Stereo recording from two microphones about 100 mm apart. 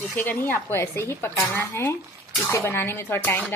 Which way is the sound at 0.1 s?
15° left (ahead or behind).